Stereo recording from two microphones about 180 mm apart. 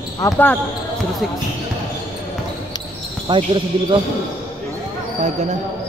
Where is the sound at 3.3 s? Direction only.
25° right (ahead or behind).